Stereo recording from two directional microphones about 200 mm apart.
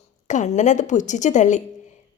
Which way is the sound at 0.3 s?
35° left (ahead or behind).